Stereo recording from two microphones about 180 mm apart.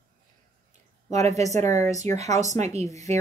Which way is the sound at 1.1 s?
40° right (ahead or behind).